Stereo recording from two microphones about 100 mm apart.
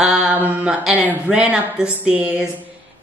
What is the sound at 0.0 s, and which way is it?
Mantra, 5° right (ahead or behind).